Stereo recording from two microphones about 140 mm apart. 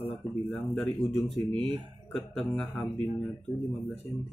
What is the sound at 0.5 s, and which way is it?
Speech, 5° left (ahead or behind).